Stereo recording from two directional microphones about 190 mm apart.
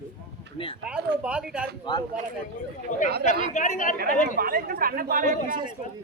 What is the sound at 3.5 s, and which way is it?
Speech, 40° left (ahead or behind).